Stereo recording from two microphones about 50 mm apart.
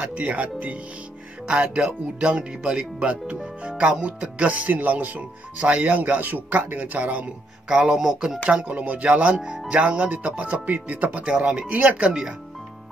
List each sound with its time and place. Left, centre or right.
0.0 s speech: right; by 8.4 s centre
8.5 s speech: right
9.7 s speech: right